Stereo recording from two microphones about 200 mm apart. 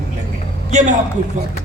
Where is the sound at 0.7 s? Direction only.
35° right (ahead or behind).